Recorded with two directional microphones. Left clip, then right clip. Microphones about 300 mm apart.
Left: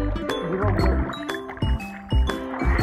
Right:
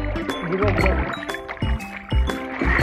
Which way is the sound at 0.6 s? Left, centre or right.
Right.